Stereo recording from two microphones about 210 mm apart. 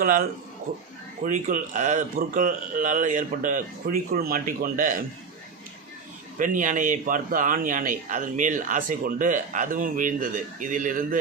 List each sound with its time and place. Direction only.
0.0 s a man's voice: 45° right (ahead or behind)
6.4 s a man's voice: 40° right (ahead or behind)